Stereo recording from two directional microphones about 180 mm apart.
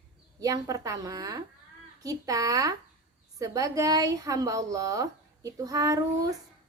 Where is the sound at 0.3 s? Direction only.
20° right (ahead or behind).